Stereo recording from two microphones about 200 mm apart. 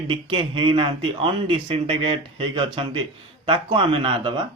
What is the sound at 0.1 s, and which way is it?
Speech, 25° right (ahead or behind).